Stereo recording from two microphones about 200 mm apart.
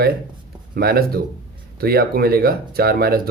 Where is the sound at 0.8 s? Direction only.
50° right (ahead or behind).